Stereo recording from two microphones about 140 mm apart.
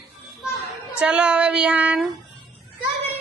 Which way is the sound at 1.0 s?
5° right (ahead or behind).